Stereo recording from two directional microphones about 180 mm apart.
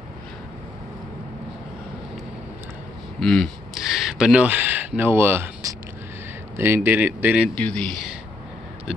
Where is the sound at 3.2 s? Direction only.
5° left (ahead or behind).